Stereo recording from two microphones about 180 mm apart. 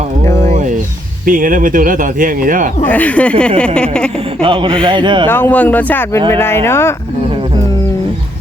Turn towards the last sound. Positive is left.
turn(degrees=15)  # may be behind; listen again after turning